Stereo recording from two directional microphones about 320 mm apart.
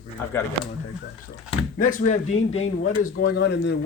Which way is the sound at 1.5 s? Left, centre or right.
Left.